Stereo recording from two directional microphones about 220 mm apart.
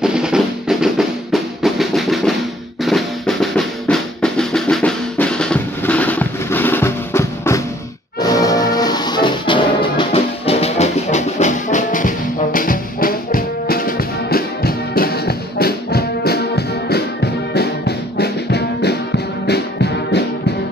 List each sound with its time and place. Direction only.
0.0 s drum: 5° right (ahead or behind)
8.2 s music: 15° left (ahead or behind); by 20.2 s 50° left (ahead or behind)